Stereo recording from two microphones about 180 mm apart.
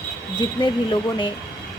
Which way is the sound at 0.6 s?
25° left (ahead or behind).